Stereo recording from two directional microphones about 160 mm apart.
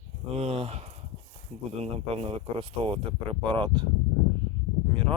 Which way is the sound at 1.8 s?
40° right (ahead or behind).